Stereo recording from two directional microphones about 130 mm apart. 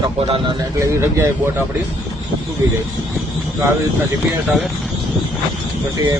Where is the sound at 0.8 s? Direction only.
20° right (ahead or behind).